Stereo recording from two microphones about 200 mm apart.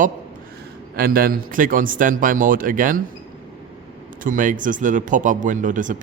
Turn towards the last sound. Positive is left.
turn(degrees=-40)  # may be behind; listen again after turning